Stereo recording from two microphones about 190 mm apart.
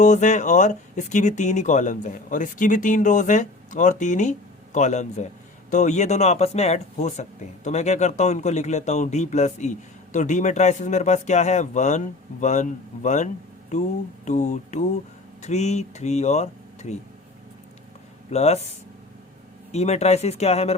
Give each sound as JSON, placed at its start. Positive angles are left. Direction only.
{"t": 0.0, "sound": "speech", "side_deg": 40}
{"t": 18.3, "sound": "speech", "side_deg": 35}
{"t": 19.7, "sound": "speech", "side_deg": 35}